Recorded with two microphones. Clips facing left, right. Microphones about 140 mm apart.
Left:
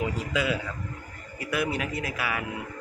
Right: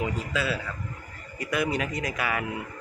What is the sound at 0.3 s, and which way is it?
Speech, 15° left (ahead or behind).